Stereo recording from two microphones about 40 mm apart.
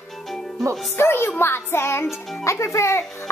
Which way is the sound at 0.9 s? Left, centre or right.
Left.